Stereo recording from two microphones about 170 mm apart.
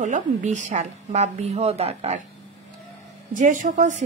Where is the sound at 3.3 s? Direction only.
50° right (ahead or behind).